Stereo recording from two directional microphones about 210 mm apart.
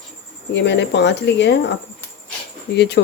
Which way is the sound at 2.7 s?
55° left (ahead or behind).